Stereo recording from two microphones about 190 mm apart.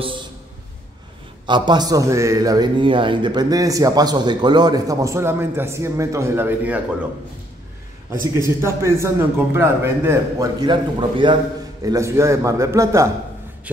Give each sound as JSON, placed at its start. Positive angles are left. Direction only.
{"t": 1.4, "sound": "a man's voice", "side_deg": -25}
{"t": 8.1, "sound": "a man's voice", "side_deg": -15}